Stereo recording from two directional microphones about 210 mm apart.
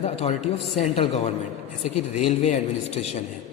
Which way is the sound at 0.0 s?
30° left (ahead or behind).